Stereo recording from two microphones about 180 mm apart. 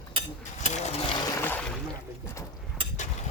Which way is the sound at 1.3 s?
10° left (ahead or behind).